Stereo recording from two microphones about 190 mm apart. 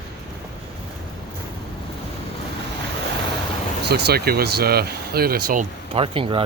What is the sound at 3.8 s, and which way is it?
Speech, 55° right (ahead or behind).